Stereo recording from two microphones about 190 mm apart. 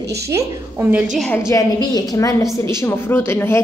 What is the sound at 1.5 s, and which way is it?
A woman's voice, 20° left (ahead or behind).